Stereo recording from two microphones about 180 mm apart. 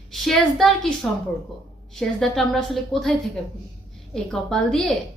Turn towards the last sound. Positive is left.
turn(degrees=5)  # may be behind; listen again after turning